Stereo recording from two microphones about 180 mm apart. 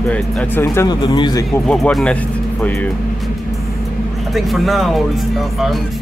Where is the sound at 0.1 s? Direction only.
10° left (ahead or behind).